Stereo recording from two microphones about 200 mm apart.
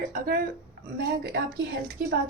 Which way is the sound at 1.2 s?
55° right (ahead or behind).